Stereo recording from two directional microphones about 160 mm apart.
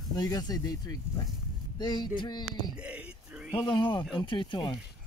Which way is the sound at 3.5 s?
30° left (ahead or behind).